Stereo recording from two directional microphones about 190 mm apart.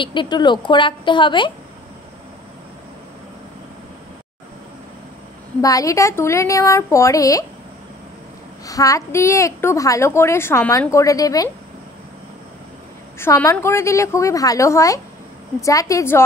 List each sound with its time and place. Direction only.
0.0 s a woman's voice: 25° left (ahead or behind)
5.6 s a woman's voice: 20° left (ahead or behind)
8.6 s a woman's voice: 15° left (ahead or behind)
13.2 s a woman's voice: 15° left (ahead or behind)